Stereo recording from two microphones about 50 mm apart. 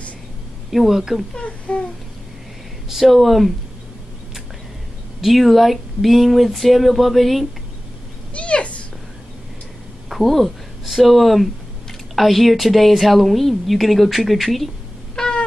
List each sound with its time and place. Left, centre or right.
0.7 s a woman's voice: centre
1.3 s baby cry: centre
2.9 s a woman's voice: centre
5.2 s a woman's voice: centre
8.4 s a sound: left
10.0 s a woman's voice: centre
15.1 s a sound: centre